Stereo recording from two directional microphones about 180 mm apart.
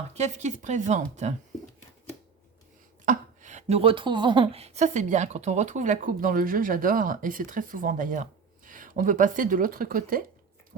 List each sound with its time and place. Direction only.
0.1 s speech: 40° right (ahead or behind)
3.1 s speech: 40° right (ahead or behind)